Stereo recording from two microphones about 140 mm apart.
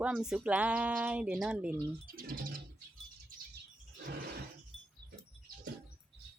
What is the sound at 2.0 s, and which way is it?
Speech, 90° right.